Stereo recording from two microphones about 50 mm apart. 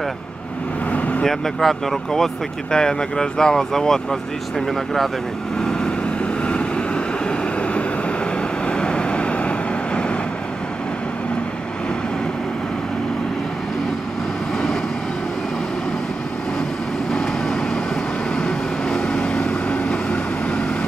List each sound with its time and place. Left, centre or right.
0.8 s vehicle: left
1.2 s speech: centre
5.6 s vehicle: centre
7.2 s vehicle: left
17.1 s vehicle: centre